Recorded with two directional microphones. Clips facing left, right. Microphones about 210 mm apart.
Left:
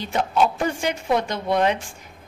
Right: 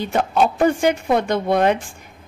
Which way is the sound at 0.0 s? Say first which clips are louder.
Right 3 dB; 55° right (ahead or behind).